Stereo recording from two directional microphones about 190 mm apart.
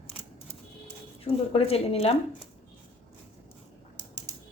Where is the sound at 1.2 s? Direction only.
30° left (ahead or behind).